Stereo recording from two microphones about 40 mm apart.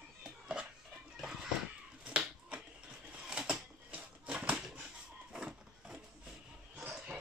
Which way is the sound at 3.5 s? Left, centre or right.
Right.